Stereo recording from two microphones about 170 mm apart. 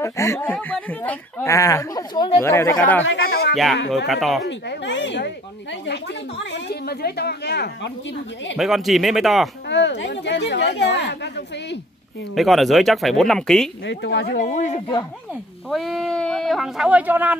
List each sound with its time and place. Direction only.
0.0 s speech: 15° left (ahead or behind)
2.4 s speech: 15° left (ahead or behind)
3.0 s speech: 80° left
4.1 s speech: centre (ahead or behind)
4.5 s speech: 90° left
8.5 s speech: centre (ahead or behind)
9.7 s speech: 90° left
12.4 s speech: centre (ahead or behind)
13.8 s speech: 90° left
14.4 s speech: 45° left (ahead or behind)
15.7 s speech: centre (ahead or behind)